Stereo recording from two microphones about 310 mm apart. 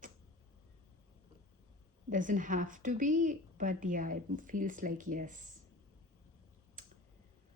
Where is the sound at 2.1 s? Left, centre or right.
Right.